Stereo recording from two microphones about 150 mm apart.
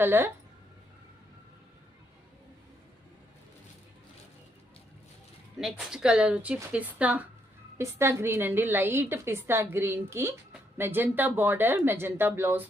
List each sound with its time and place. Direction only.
0.0 s a woman's voice: 15° right (ahead or behind)
5.9 s a woman's voice: 5° right (ahead or behind)